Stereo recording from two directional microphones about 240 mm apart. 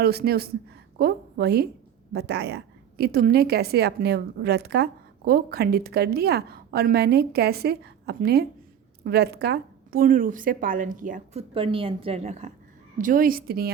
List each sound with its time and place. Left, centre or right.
0.0 s a woman's voice: right